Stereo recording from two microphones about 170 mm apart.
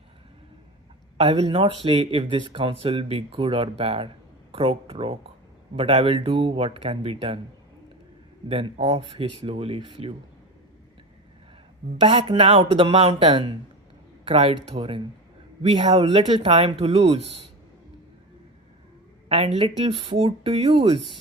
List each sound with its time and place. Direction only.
1.2 s speech: 35° right (ahead or behind)
8.4 s speech: 35° right (ahead or behind)
11.9 s speech: 30° right (ahead or behind)
19.5 s speech: 35° right (ahead or behind)